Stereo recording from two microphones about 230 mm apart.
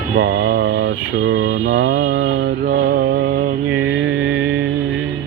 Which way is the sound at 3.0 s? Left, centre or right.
Right.